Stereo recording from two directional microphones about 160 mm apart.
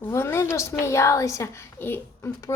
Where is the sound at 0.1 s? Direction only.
15° left (ahead or behind).